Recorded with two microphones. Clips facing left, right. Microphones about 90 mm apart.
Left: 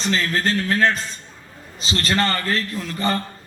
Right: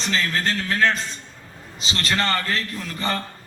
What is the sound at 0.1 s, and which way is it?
A man's voice, 40° left (ahead or behind).